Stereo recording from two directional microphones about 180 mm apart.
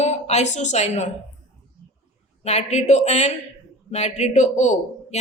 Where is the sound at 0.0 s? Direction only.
40° left (ahead or behind).